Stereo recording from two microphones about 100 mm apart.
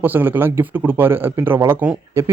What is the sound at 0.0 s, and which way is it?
Speech, 20° right (ahead or behind).